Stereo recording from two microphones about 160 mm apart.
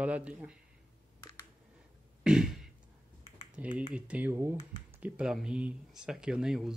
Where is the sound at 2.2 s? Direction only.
5° right (ahead or behind).